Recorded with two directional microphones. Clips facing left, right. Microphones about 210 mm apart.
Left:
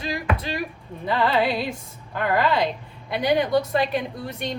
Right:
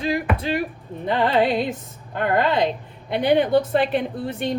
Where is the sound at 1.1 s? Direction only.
20° right (ahead or behind).